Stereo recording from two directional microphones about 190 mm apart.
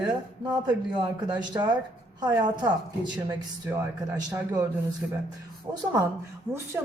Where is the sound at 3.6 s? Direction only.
15° right (ahead or behind).